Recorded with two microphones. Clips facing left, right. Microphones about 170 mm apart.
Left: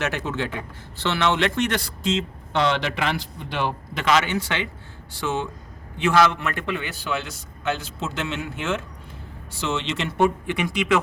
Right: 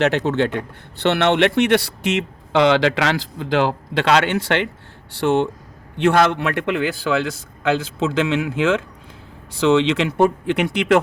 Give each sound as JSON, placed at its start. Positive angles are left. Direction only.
{"t": 0.0, "sound": "speech", "side_deg": -65}
{"t": 10.2, "sound": "speech", "side_deg": -65}